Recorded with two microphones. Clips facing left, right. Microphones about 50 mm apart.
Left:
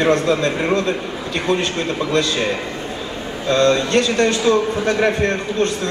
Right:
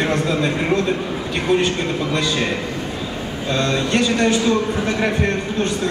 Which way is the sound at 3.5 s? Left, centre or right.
Centre.